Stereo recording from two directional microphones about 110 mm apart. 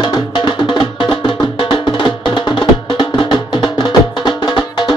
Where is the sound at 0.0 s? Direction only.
45° left (ahead or behind).